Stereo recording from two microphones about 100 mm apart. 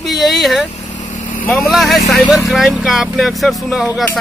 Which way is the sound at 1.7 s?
Centre (ahead or behind).